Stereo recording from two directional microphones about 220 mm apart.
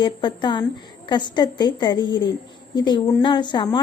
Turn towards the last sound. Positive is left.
turn(degrees=20)  # may be behind; listen again after turning